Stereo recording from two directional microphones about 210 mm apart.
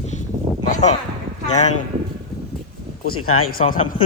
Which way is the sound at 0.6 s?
35° left (ahead or behind).